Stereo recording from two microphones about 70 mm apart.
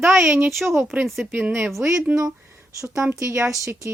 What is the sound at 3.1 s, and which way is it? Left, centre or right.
Speech, right.